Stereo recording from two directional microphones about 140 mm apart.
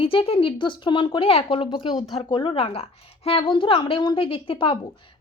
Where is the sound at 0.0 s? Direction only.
40° left (ahead or behind).